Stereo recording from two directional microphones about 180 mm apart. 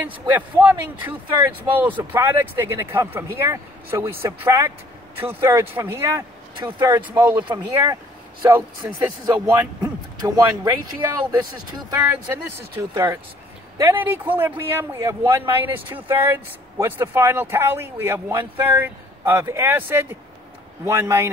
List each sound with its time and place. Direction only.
0.0 s speech: 10° right (ahead or behind)
12.0 s speech: 10° right (ahead or behind)